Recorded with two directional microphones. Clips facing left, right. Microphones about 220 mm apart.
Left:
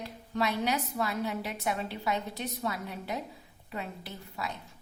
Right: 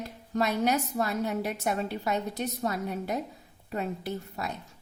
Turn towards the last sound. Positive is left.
turn(degrees=-45)  # may be behind; listen again after turning